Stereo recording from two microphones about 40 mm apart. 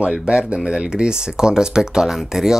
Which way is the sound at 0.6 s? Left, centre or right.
Centre.